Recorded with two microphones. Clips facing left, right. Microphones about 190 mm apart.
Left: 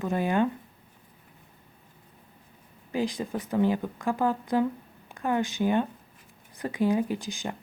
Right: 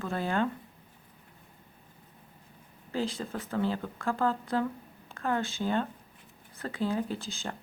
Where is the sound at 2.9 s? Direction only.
15° left (ahead or behind).